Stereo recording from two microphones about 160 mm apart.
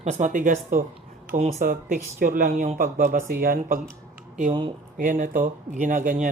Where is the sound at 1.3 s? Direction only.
45° right (ahead or behind).